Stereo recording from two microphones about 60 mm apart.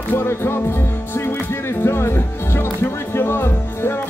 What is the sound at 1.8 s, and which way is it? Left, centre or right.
Music, left.